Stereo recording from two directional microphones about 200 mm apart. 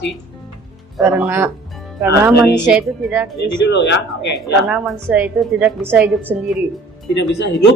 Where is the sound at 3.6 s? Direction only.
60° left (ahead or behind).